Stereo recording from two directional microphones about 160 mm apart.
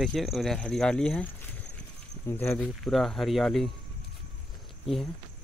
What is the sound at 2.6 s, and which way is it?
Speech, centre (ahead or behind).